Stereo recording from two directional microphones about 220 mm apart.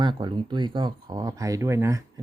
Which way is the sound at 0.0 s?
20° right (ahead or behind).